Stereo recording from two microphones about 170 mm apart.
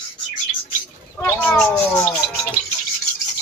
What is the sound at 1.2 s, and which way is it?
Speech, 10° left (ahead or behind).